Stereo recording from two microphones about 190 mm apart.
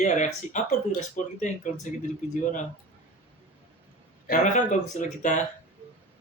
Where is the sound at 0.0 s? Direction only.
40° left (ahead or behind).